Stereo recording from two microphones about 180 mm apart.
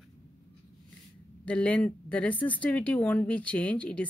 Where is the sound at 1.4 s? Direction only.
10° left (ahead or behind).